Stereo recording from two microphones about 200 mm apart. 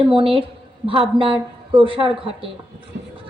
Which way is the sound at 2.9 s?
60° right (ahead or behind).